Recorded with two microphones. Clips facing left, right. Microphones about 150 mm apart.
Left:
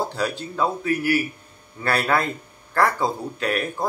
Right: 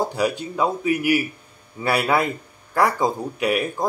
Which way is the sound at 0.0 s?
15° right (ahead or behind).